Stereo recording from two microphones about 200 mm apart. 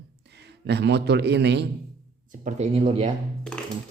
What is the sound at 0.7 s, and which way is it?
Speech, 55° right (ahead or behind).